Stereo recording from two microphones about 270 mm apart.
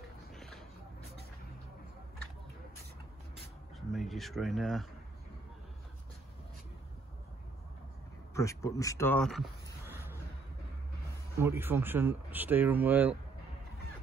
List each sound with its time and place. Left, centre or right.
0.3 s a sound: centre
3.9 s speech: centre
8.4 s speech: centre
11.3 s speech: centre